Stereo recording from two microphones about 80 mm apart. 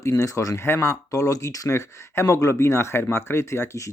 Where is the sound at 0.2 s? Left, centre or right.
Left.